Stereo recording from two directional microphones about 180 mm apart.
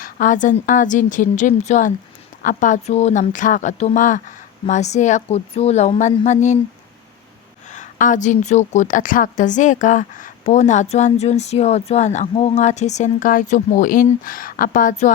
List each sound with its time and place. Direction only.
0.0 s a woman's voice: 45° left (ahead or behind)
7.7 s a woman's voice: 45° left (ahead or behind)